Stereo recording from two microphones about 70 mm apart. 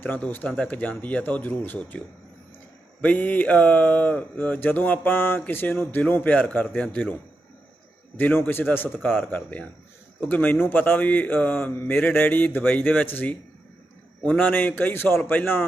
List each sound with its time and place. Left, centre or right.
0.0 s speech: left
3.0 s speech: left